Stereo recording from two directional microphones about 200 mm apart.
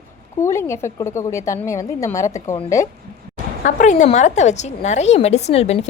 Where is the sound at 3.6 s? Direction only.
40° left (ahead or behind).